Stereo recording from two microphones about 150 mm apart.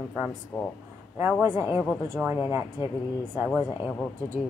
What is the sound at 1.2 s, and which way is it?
A woman's voice, 15° right (ahead or behind).